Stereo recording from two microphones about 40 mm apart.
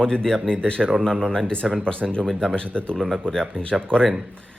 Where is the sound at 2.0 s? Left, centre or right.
Centre.